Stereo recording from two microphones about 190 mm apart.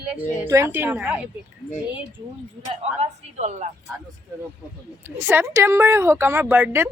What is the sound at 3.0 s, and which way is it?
Speech, 35° right (ahead or behind).